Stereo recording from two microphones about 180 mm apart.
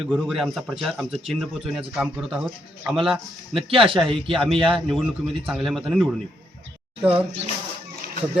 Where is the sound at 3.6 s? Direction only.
30° right (ahead or behind).